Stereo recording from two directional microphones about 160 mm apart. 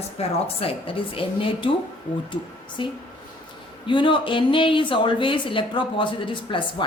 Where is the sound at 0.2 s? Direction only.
35° left (ahead or behind).